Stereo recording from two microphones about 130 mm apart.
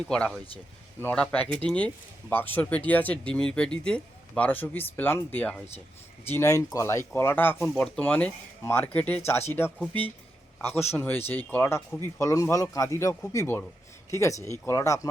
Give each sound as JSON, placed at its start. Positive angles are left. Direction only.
{"t": 0.0, "sound": "speech", "side_deg": 10}